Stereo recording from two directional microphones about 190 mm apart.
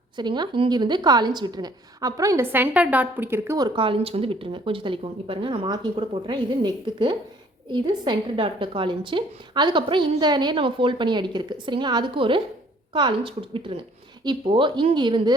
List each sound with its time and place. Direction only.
0.2 s a woman's voice: 25° right (ahead or behind)
3.8 s a woman's voice: 30° right (ahead or behind)